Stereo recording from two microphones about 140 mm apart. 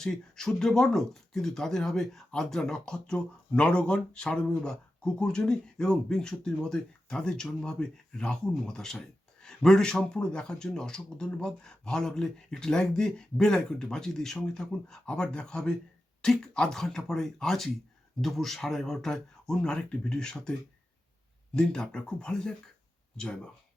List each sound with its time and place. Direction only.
0.0 s speech: 5° left (ahead or behind)